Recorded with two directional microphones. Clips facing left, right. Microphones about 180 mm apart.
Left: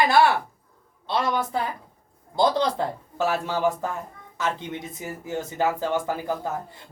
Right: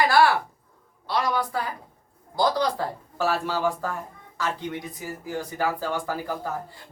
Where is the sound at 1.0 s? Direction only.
25° left (ahead or behind).